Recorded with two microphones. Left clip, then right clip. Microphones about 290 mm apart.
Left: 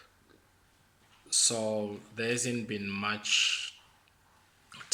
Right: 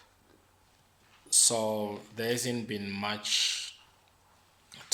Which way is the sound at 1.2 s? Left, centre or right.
Centre.